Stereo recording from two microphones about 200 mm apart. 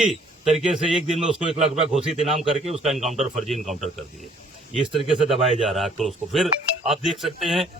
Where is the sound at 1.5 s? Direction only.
35° right (ahead or behind).